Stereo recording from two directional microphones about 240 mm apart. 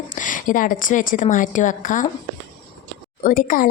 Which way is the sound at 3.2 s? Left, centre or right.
Left.